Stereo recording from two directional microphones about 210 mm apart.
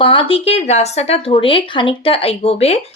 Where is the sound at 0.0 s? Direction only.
25° left (ahead or behind).